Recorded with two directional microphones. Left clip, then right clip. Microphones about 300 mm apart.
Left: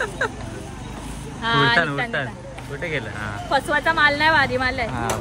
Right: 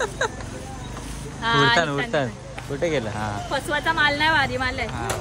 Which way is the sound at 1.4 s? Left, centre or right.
Centre.